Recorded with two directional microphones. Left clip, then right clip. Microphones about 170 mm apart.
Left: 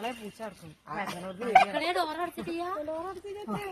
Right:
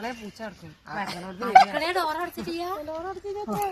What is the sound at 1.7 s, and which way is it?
A woman's voice, 15° right (ahead or behind).